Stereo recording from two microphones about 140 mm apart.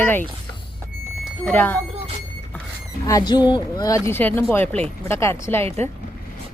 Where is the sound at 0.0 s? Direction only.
15° left (ahead or behind).